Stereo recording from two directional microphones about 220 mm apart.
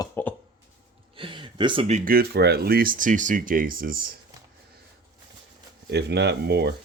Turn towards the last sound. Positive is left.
turn(degrees=-50)  # may be behind; listen again after turning